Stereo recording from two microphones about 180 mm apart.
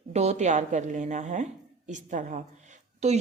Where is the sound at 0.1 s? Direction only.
35° right (ahead or behind).